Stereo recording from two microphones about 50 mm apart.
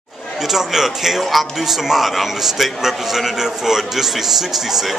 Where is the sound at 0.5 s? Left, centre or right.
Centre.